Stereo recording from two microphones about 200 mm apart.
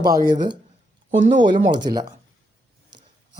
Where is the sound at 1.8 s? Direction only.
20° right (ahead or behind).